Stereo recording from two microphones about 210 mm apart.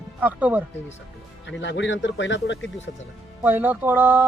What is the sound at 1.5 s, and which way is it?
Speech, 60° left (ahead or behind).